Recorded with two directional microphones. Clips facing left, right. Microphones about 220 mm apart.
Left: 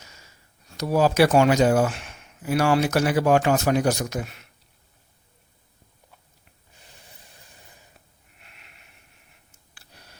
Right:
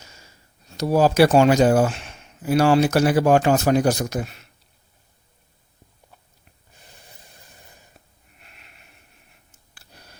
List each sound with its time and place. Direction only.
0.7 s speech: 30° right (ahead or behind)